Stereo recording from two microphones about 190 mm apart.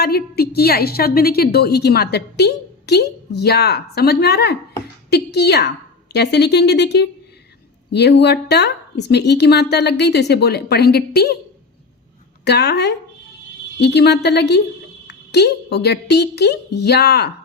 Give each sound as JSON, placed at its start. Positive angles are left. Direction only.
{"t": 0.0, "sound": "a woman's voice", "side_deg": 55}
{"t": 12.5, "sound": "a woman's voice", "side_deg": 60}